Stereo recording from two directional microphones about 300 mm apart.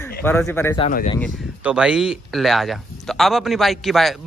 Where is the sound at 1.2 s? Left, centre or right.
Centre.